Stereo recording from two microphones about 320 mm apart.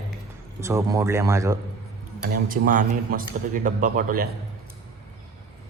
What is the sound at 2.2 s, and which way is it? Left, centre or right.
A man's voice, right.